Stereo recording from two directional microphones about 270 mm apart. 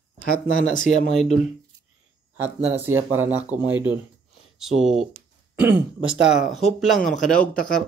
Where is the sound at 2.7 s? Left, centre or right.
Centre.